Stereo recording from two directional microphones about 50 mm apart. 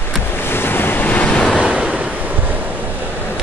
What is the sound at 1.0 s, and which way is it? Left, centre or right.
Waves, left.